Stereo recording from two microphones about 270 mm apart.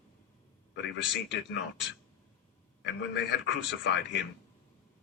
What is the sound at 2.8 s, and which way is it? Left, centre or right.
A man's voice, left.